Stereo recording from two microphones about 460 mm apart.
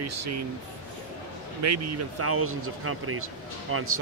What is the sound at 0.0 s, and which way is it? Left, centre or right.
Speech, right.